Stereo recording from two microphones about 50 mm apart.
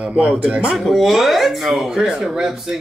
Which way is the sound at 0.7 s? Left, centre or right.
Centre.